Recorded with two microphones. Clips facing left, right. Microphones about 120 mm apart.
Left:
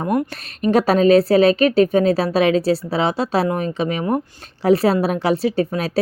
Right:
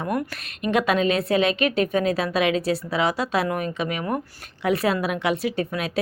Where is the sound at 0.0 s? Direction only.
30° left (ahead or behind).